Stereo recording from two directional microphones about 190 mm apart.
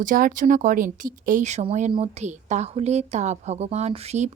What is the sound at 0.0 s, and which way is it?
A woman's voice, 45° right (ahead or behind).